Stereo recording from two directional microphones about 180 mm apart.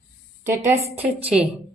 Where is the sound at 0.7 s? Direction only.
15° right (ahead or behind).